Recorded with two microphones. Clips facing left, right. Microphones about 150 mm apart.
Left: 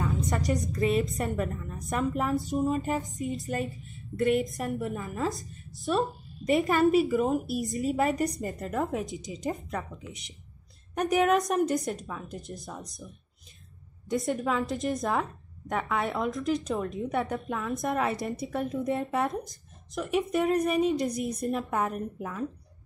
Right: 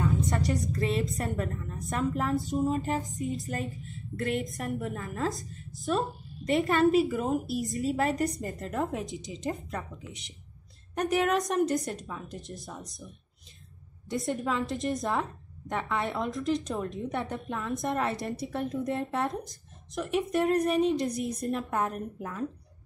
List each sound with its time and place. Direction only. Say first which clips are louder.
1.0 s a woman's voice: left 2 dB; centre (ahead or behind)
9.2 s speech: left 1 dB; 45° left (ahead or behind)
9.5 s a woman's voice: left 1 dB; centre (ahead or behind)
14.4 s a woman's voice: left 1 dB; centre (ahead or behind)